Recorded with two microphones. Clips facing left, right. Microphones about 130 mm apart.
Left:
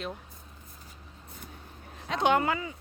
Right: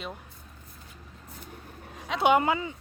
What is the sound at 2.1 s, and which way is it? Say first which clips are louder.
Speech: right 3 dB; 10° right (ahead or behind).